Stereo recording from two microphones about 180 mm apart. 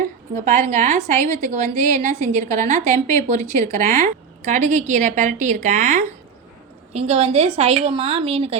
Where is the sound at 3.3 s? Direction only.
15° left (ahead or behind).